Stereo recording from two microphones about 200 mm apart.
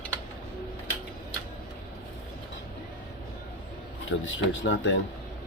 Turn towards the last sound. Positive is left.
turn(degrees=65)  # may be behind; listen again after turning